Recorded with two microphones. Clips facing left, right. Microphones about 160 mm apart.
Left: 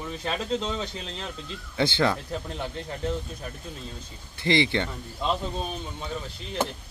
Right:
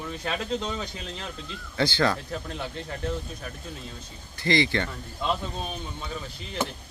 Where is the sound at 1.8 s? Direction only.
20° left (ahead or behind).